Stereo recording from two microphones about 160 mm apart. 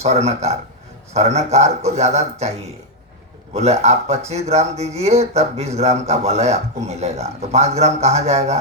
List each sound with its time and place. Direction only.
0.0 s speech: 45° right (ahead or behind)
3.5 s speech: 45° right (ahead or behind)